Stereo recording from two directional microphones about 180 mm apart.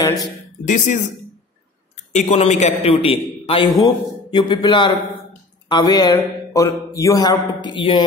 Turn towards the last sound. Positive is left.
turn(degrees=25)  # may be behind; listen again after turning